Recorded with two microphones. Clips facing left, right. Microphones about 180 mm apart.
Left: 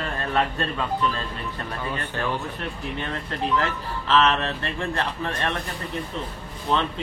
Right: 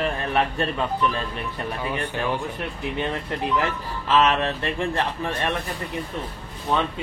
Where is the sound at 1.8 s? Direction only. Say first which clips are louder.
Right 2 dB; 15° right (ahead or behind).